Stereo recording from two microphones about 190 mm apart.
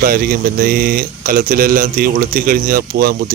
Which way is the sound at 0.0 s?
50° right (ahead or behind).